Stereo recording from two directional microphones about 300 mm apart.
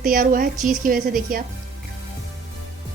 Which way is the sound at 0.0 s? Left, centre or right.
Right.